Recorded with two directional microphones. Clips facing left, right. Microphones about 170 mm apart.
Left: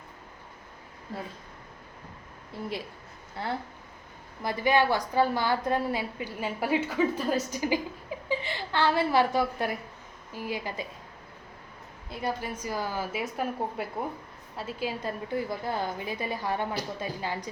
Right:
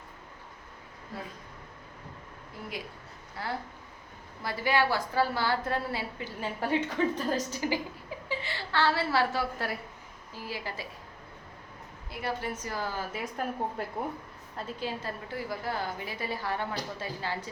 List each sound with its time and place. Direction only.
3.4 s a woman's voice: 25° left (ahead or behind)
12.1 s a woman's voice: 15° left (ahead or behind)